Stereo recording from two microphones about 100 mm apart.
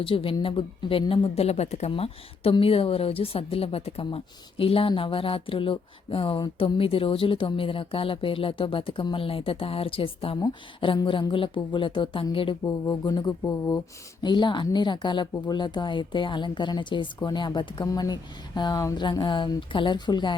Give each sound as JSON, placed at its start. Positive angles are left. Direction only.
{"t": 0.0, "sound": "speech", "side_deg": 65}
{"t": 4.0, "sound": "speech", "side_deg": 65}
{"t": 6.7, "sound": "speech", "side_deg": 65}
{"t": 10.8, "sound": "speech", "side_deg": 55}
{"t": 12.6, "sound": "a woman's voice", "side_deg": 35}
{"t": 18.9, "sound": "a woman's voice", "side_deg": 50}